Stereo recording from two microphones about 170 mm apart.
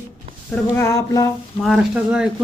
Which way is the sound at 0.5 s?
15° left (ahead or behind).